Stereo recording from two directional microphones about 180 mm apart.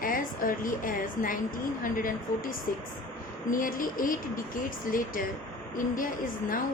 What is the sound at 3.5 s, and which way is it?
Speech, 50° left (ahead or behind).